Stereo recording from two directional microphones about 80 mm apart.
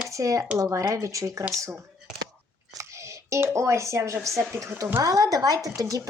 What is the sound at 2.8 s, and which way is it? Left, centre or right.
Speech, right.